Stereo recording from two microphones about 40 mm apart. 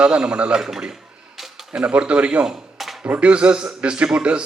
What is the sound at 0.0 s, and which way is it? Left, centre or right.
Speech, right.